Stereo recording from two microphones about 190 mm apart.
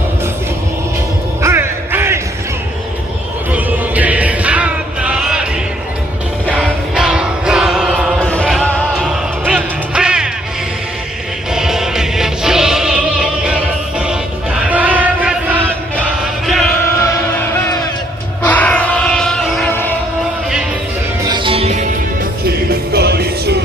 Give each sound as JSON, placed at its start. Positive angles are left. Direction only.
{"t": 1.4, "sound": "music", "side_deg": -15}
{"t": 3.5, "sound": "music", "side_deg": -10}
{"t": 6.5, "sound": "music", "side_deg": -5}
{"t": 8.2, "sound": "music", "side_deg": 5}
{"t": 11.5, "sound": "music", "side_deg": 0}
{"t": 17.0, "sound": "music", "side_deg": 10}
{"t": 18.4, "sound": "a sound", "side_deg": 10}
{"t": 21.2, "sound": "music", "side_deg": -25}